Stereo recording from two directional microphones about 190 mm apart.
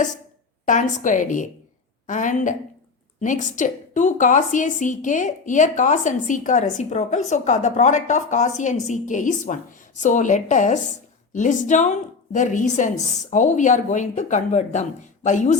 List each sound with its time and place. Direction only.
0.6 s a woman's voice: 40° left (ahead or behind)